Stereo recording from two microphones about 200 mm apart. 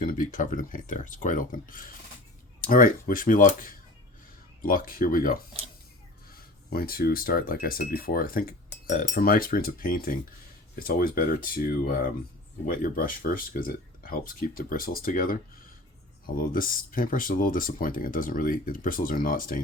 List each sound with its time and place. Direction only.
0.0 s speech: 40° left (ahead or behind)
16.4 s speech: 45° left (ahead or behind)